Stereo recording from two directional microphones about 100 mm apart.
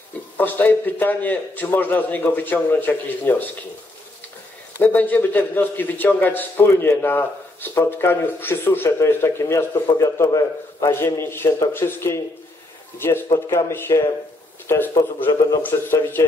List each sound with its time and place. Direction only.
0.4 s a man's voice: 20° left (ahead or behind)
4.7 s a man's voice: 20° left (ahead or behind)